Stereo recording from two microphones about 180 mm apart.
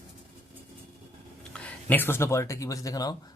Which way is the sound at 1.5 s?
10° left (ahead or behind).